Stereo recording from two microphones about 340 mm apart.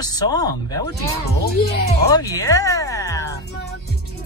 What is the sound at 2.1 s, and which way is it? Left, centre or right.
Music, centre.